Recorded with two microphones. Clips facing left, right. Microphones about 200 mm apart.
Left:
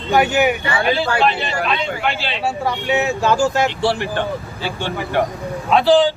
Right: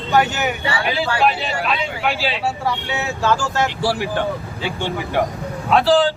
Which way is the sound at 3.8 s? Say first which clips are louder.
Left 1 dB; 5° right (ahead or behind).